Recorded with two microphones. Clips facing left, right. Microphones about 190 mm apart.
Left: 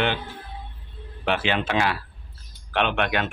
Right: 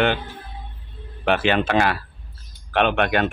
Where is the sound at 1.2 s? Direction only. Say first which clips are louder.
Right 5 dB; 50° right (ahead or behind).